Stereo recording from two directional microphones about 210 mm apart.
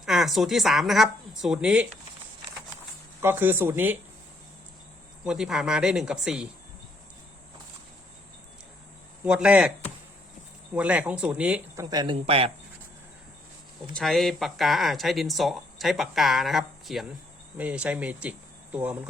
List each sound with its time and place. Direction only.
0.0 s speech: centre (ahead or behind)
3.2 s speech: 10° right (ahead or behind)
5.2 s speech: 5° right (ahead or behind)
9.2 s speech: 5° right (ahead or behind)
10.8 s speech: 5° right (ahead or behind)
11.9 s speech: 20° right (ahead or behind)
13.9 s speech: centre (ahead or behind)